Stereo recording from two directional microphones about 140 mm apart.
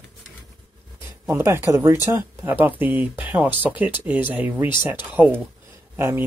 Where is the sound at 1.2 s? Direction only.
20° right (ahead or behind).